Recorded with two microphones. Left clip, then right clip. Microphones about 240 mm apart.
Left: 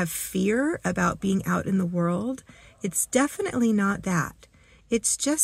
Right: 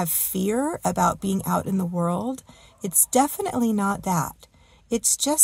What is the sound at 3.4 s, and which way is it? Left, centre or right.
Speech, right.